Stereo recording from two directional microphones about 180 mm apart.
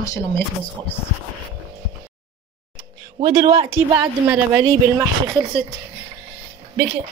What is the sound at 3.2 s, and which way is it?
Speech, 20° right (ahead or behind).